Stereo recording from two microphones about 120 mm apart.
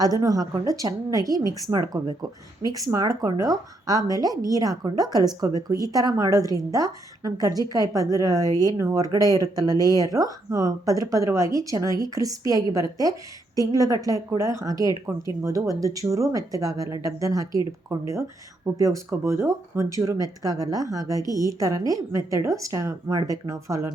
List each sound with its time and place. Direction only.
0.0 s a woman's voice: 30° right (ahead or behind)